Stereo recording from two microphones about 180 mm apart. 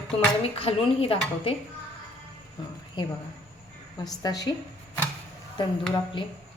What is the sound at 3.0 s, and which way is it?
A woman's voice, 25° left (ahead or behind).